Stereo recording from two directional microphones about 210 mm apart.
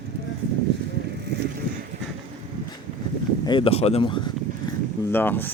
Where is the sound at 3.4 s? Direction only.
25° left (ahead or behind).